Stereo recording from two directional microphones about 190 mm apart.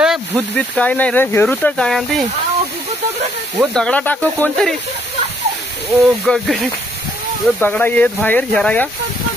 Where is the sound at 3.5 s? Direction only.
5° left (ahead or behind).